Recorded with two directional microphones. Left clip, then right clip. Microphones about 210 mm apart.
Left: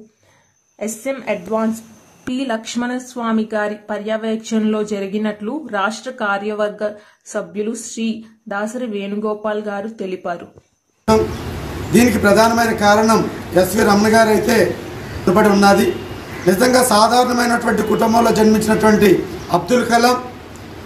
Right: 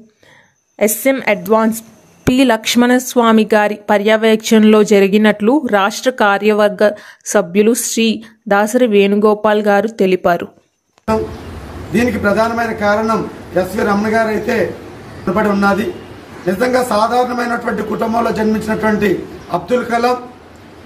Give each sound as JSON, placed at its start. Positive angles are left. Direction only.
{"t": 0.7, "sound": "speech", "side_deg": -50}
{"t": 11.9, "sound": "a man's voice", "side_deg": 0}